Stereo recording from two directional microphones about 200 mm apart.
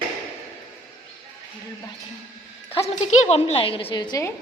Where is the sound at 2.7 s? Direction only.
30° left (ahead or behind); by 4.3 s 15° left (ahead or behind).